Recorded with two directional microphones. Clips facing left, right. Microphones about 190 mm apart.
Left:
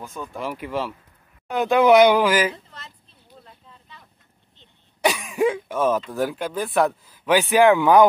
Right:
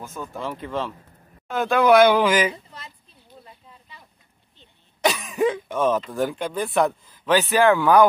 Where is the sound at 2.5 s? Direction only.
10° right (ahead or behind).